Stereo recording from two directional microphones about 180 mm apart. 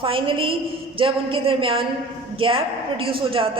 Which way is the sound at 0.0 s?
30° right (ahead or behind).